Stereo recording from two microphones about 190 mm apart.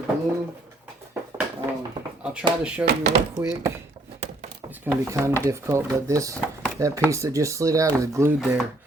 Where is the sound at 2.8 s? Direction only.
60° right (ahead or behind).